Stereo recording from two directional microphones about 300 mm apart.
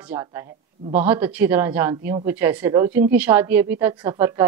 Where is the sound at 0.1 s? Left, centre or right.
Centre.